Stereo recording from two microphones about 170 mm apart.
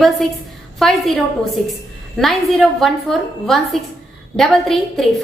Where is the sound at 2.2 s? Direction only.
Centre (ahead or behind).